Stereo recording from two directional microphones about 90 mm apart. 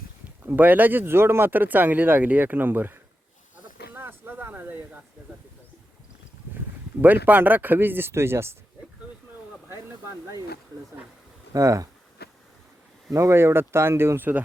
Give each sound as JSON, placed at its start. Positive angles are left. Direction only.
{"t": 0.4, "sound": "speech", "side_deg": -20}
{"t": 3.9, "sound": "a sound", "side_deg": -20}
{"t": 7.0, "sound": "speech", "side_deg": -20}
{"t": 9.6, "sound": "speech", "side_deg": -30}
{"t": 11.5, "sound": "speech", "side_deg": -40}
{"t": 13.1, "sound": "speech", "side_deg": -30}